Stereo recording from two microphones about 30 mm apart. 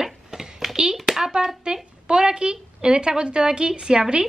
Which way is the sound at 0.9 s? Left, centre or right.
Centre.